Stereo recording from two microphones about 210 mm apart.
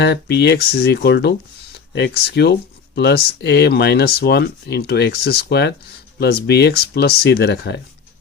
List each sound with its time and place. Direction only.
0.0 s speech: 50° left (ahead or behind)